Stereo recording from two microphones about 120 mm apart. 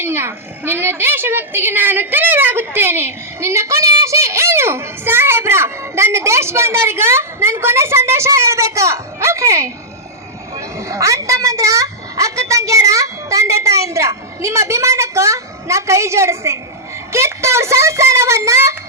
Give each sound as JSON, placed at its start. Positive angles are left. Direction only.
{"t": 0.0, "sound": "a child's voice", "side_deg": -20}